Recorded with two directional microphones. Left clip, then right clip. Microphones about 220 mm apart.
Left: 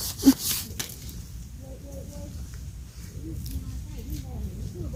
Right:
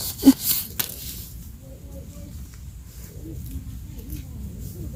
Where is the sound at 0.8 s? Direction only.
25° right (ahead or behind).